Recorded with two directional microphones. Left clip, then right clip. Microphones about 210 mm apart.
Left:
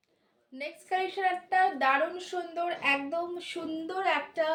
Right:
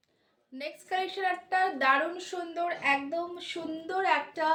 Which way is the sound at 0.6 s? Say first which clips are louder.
Left 1 dB; 20° right (ahead or behind).